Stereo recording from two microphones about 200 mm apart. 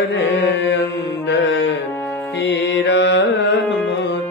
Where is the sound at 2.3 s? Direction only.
60° left (ahead or behind).